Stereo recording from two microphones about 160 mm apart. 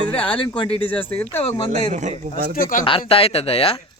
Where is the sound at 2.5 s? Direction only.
60° left (ahead or behind).